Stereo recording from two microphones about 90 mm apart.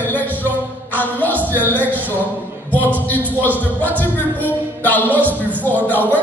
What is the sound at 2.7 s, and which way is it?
Speech, 20° left (ahead or behind).